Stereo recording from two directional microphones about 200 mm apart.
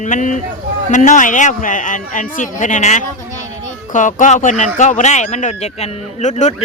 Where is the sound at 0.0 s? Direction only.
40° left (ahead or behind).